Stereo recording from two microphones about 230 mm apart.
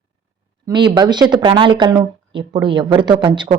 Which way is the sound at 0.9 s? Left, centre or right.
Centre.